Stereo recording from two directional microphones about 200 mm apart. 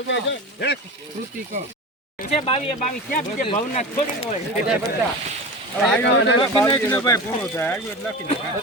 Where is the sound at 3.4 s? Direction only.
35° left (ahead or behind).